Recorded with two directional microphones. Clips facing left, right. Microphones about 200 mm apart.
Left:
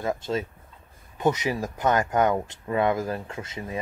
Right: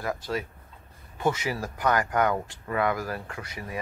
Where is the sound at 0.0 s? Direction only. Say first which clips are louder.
Left 3 dB; 25° left (ahead or behind).